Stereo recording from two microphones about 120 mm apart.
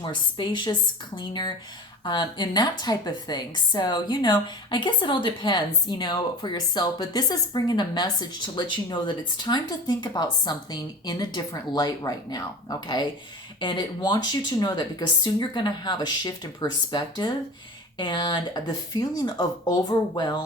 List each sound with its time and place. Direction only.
0.0 s a woman's voice: 40° left (ahead or behind)